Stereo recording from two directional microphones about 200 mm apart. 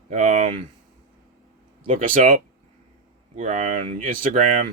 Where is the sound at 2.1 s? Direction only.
40° right (ahead or behind).